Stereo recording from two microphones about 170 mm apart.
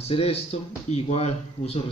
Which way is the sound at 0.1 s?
35° left (ahead or behind).